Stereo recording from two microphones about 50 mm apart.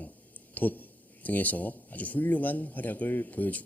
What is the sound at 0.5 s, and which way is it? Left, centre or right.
Speech, left.